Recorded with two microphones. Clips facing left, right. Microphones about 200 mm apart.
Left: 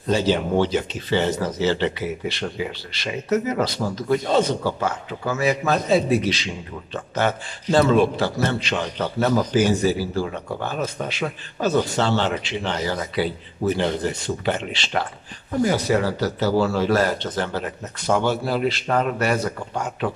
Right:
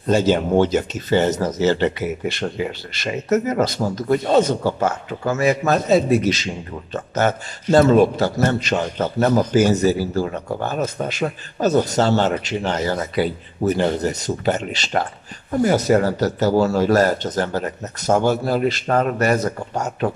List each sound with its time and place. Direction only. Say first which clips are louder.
0.1 s speech: right 4 dB; 45° right (ahead or behind)